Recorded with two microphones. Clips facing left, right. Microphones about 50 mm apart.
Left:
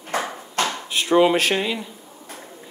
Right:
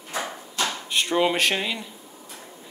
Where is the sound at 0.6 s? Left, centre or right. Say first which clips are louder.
Left 4 dB; left.